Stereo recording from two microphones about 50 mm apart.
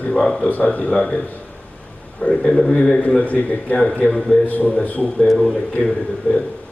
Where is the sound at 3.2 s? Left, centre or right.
Left.